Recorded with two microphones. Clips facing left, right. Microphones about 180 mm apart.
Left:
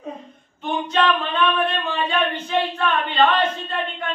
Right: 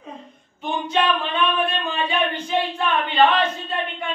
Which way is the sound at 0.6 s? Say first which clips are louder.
Left 1 dB; 10° right (ahead or behind).